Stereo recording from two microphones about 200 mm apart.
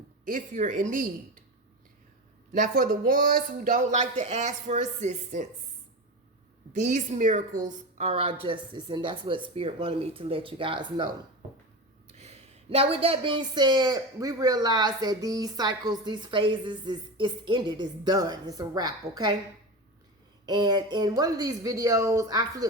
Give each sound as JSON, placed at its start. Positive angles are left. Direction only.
{"t": 0.3, "sound": "speech", "side_deg": -40}
{"t": 2.5, "sound": "speech", "side_deg": -40}
{"t": 6.8, "sound": "speech", "side_deg": -35}
{"t": 12.1, "sound": "speech", "side_deg": -30}
{"t": 20.4, "sound": "speech", "side_deg": -20}